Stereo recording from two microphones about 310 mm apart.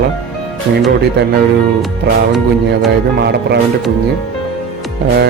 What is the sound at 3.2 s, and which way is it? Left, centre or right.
Speech, right.